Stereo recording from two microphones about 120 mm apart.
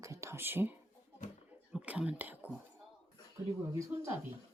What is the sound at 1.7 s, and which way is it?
Whispering, 10° right (ahead or behind).